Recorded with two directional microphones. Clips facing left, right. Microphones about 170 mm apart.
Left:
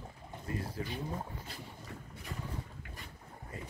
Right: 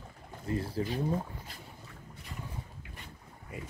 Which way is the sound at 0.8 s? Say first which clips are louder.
Right 7 dB; 30° right (ahead or behind).